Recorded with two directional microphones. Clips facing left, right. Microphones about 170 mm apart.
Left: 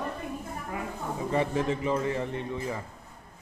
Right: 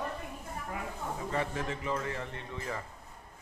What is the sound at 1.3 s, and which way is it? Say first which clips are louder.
Speech: left 8 dB; 20° left (ahead or behind).